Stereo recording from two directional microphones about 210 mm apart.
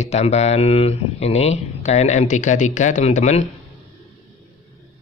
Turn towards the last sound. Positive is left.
turn(degrees=35)  # may be behind; listen again after turning